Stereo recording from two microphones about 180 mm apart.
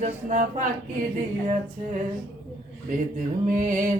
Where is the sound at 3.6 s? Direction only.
45° right (ahead or behind).